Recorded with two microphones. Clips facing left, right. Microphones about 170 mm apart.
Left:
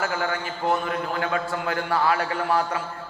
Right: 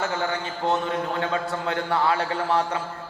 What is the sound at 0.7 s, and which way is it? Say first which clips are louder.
A man's voice: even; 25° right (ahead or behind).